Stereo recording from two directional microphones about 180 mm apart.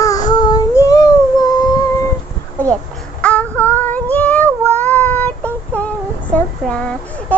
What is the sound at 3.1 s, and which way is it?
Child singing, 5° left (ahead or behind).